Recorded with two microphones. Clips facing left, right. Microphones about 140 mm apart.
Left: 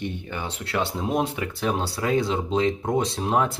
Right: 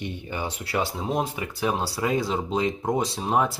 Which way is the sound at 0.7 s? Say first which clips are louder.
Left 2 dB; centre (ahead or behind).